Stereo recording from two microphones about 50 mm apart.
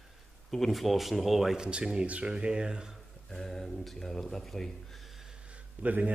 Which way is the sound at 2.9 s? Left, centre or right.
Centre.